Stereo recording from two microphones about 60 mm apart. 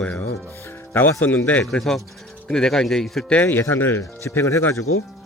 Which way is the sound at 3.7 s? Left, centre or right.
Left.